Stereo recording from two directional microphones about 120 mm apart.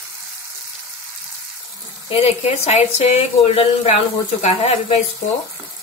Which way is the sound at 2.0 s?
55° left (ahead or behind).